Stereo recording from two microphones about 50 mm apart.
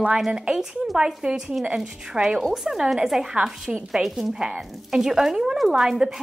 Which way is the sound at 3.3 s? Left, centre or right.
Centre.